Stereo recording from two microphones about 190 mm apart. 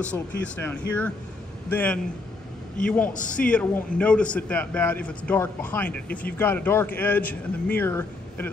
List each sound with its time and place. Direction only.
0.0 s a man's voice: 5° left (ahead or behind)
3.1 s a man's voice: 45° left (ahead or behind)
3.3 s a man's voice: 5° left (ahead or behind)